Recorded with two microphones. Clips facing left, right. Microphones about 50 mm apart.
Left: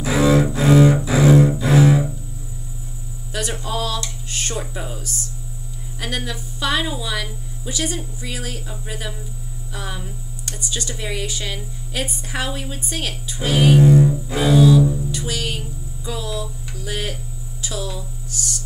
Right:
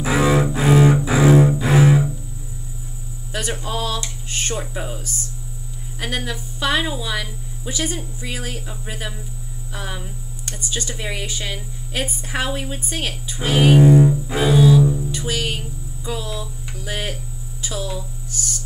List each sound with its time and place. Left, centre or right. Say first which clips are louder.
0.0 s cello: left 1 dB; centre
3.3 s a woman's voice: even; centre
16.1 s a sound: left 1 dB; centre
17.6 s speech: right 1 dB; centre